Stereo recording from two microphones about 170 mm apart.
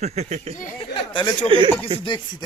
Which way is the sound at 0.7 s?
30° left (ahead or behind).